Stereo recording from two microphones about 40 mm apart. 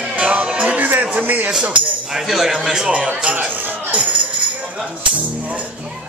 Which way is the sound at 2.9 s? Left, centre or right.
Right.